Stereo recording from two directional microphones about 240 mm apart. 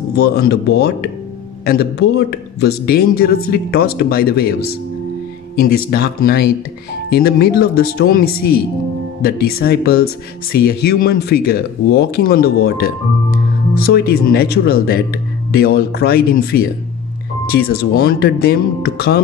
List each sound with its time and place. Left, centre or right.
0.1 s a man's voice: left
5.6 s a man's voice: left